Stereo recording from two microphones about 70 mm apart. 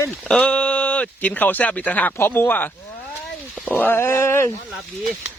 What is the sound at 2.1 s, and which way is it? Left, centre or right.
Speech, left.